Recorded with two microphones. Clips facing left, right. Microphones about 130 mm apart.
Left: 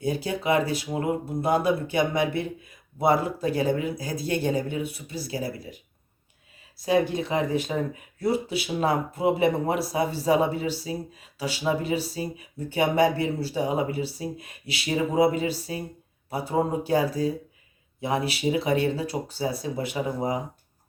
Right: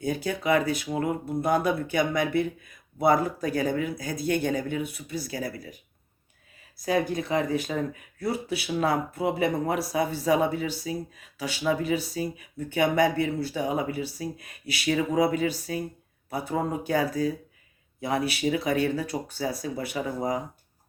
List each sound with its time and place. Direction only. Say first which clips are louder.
0.0 s speech: left 1 dB; 30° left (ahead or behind)
6.8 s speech: left 3 dB; 25° left (ahead or behind)